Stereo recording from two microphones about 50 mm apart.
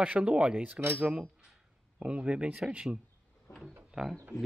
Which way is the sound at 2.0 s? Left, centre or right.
Right.